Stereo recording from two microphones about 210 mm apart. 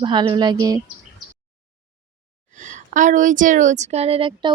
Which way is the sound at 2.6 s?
35° right (ahead or behind).